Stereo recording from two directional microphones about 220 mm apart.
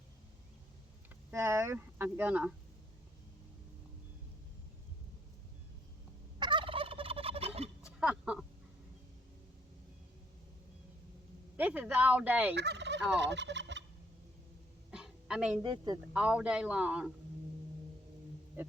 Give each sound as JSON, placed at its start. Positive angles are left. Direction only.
{"t": 1.3, "sound": "speech", "side_deg": -10}
{"t": 6.4, "sound": "fowl", "side_deg": -20}
{"t": 7.9, "sound": "a sound", "side_deg": -5}
{"t": 11.5, "sound": "a sound", "side_deg": -5}
{"t": 12.5, "sound": "fowl", "side_deg": -50}
{"t": 14.8, "sound": "a sound", "side_deg": -5}
{"t": 15.6, "sound": "a woman's voice", "side_deg": -20}
{"t": 16.1, "sound": "a man's voice", "side_deg": -5}
{"t": 18.6, "sound": "music", "side_deg": -10}